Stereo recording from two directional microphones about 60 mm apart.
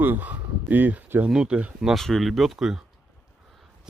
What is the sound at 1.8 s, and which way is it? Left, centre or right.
Speech, centre.